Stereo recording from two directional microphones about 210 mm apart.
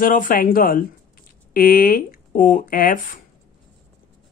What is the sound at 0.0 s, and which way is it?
Speech, 40° left (ahead or behind).